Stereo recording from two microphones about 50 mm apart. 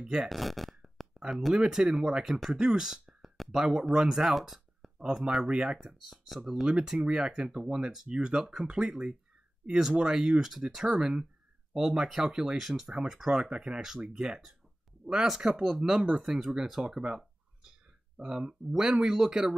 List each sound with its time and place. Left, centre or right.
0.0 s speech: centre
0.3 s a sound: centre
1.3 s speech: centre
4.4 s a sound: centre
5.0 s speech: centre
6.0 s speech: centre
6.5 s speech: centre